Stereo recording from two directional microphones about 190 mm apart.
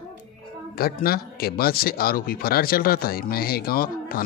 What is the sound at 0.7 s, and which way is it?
Speech, 50° left (ahead or behind).